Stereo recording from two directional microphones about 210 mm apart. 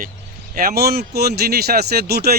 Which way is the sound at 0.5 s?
45° right (ahead or behind).